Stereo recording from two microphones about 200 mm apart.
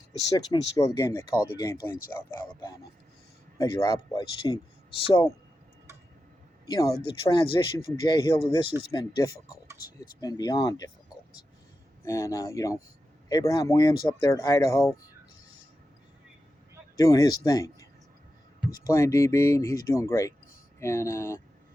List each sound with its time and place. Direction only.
0.3 s speech: 20° left (ahead or behind)
3.6 s speech: 20° left (ahead or behind)
6.7 s speech: 20° left (ahead or behind)
12.0 s speech: 15° left (ahead or behind)
17.0 s speech: 20° left (ahead or behind)
18.9 s speech: 15° left (ahead or behind)